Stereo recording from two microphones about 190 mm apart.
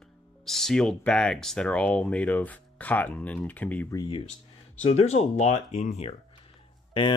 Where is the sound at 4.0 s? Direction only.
25° left (ahead or behind).